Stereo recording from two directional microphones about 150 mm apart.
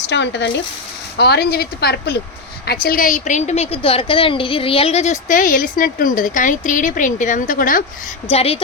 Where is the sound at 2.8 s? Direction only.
70° left (ahead or behind).